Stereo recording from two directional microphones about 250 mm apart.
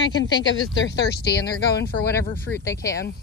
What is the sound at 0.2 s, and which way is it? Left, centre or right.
Speech, left.